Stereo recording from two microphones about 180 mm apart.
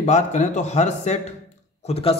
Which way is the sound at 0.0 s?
40° left (ahead or behind).